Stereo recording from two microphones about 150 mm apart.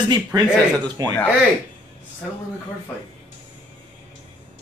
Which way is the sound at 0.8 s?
25° right (ahead or behind).